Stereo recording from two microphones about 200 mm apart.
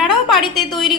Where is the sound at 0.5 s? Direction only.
Centre (ahead or behind).